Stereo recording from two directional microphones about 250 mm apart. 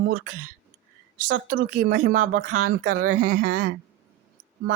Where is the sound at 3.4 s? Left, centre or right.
Right.